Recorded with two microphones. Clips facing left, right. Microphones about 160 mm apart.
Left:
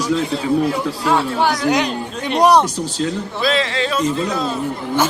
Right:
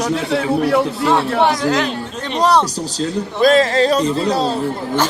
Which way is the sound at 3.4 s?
45° right (ahead or behind).